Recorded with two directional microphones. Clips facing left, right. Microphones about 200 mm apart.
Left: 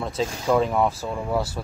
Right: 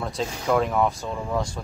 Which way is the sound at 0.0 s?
Centre (ahead or behind).